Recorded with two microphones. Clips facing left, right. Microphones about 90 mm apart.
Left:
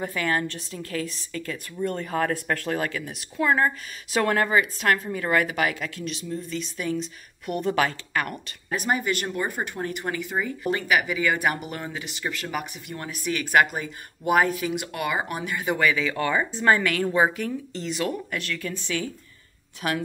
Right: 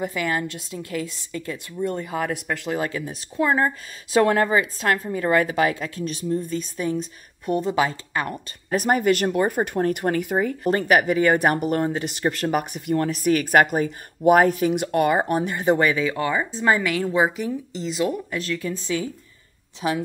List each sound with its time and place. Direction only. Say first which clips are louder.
0.0 s a woman's voice: right 1 dB; 15° right (ahead or behind)
2.8 s speech: right 2 dB; 25° right (ahead or behind)
7.4 s speech: right 3 dB; 25° right (ahead or behind)
8.7 s a woman's voice: right 6 dB; 50° right (ahead or behind); by 19.0 s 30° right (ahead or behind)